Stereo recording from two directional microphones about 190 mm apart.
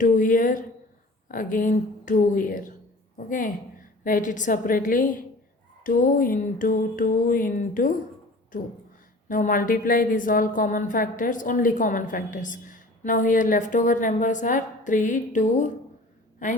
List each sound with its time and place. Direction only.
0.0 s a woman's voice: 45° left (ahead or behind)
9.3 s a woman's voice: 45° left (ahead or behind)